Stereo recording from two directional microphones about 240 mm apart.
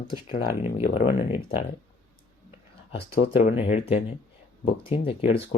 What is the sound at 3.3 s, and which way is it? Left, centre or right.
Speech, left.